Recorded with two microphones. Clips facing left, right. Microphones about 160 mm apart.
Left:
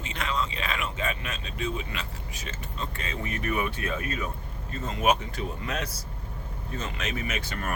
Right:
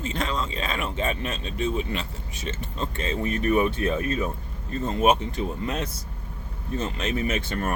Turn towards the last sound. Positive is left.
turn(degrees=-25)  # may be behind; listen again after turning